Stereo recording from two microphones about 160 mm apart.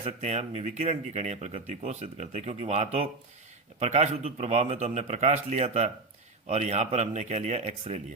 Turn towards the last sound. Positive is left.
turn(degrees=-45)  # may be behind; listen again after turning